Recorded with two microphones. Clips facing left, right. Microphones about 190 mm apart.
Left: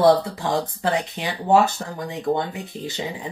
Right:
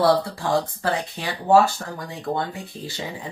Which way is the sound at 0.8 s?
20° left (ahead or behind).